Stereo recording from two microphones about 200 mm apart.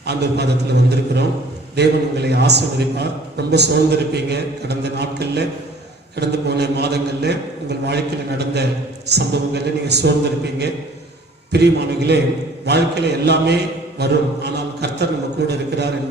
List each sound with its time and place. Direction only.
0.0 s a man's voice: 55° right (ahead or behind)
11.5 s a man's voice: 55° right (ahead or behind)